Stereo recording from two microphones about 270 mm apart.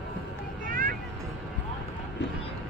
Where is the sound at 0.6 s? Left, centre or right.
Right.